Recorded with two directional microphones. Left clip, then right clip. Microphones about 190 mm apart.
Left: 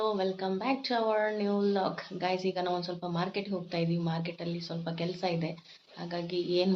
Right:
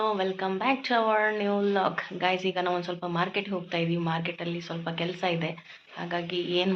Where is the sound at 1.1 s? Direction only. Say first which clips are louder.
Right 4 dB; centre (ahead or behind).